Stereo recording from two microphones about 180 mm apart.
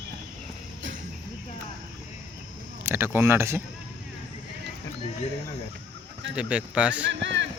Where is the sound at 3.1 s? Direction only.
15° right (ahead or behind).